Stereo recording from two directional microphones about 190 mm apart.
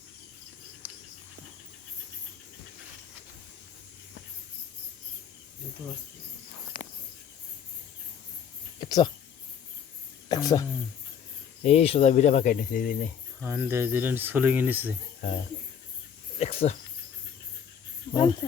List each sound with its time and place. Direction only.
8.8 s speech: 20° left (ahead or behind)
10.2 s speech: 20° left (ahead or behind)
11.6 s speech: 35° left (ahead or behind)
13.4 s speech: 15° right (ahead or behind)
16.4 s cricket: 35° left (ahead or behind)
18.1 s speech: 20° left (ahead or behind)